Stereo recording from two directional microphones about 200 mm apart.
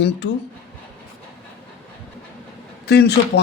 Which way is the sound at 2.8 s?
55° left (ahead or behind).